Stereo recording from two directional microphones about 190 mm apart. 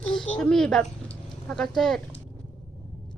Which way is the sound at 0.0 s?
5° left (ahead or behind).